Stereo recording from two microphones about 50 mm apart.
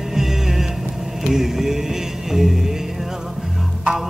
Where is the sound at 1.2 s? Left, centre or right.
Centre.